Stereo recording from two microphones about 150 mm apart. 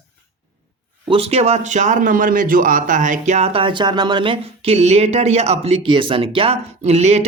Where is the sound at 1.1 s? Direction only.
45° right (ahead or behind).